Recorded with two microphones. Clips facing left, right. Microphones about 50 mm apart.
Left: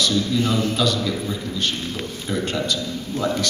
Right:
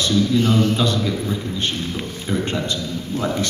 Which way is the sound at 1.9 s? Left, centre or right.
Centre.